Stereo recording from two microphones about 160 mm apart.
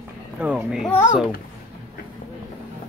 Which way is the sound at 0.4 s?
10° right (ahead or behind).